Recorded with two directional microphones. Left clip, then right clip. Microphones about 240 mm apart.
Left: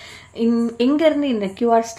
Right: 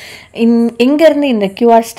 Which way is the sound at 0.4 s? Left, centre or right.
Right.